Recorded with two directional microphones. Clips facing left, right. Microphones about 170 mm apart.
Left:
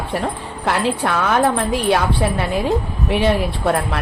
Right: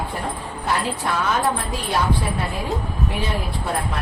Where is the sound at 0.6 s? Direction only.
80° left.